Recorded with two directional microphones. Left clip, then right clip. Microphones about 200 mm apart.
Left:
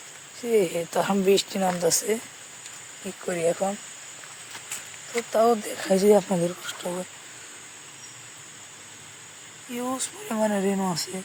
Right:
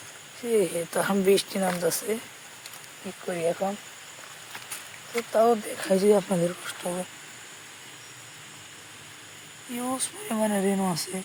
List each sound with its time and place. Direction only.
0.5 s speech: 10° left (ahead or behind)
3.2 s speech: 25° left (ahead or behind)
5.1 s speech: 15° left (ahead or behind)
9.8 s speech: 5° left (ahead or behind)